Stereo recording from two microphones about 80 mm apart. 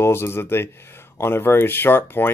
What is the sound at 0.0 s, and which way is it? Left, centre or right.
Speech, left.